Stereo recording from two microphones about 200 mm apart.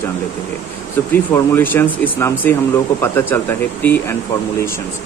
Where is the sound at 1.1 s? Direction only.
10° left (ahead or behind).